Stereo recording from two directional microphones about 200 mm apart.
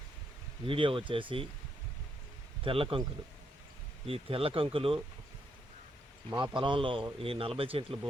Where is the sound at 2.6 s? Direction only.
25° right (ahead or behind).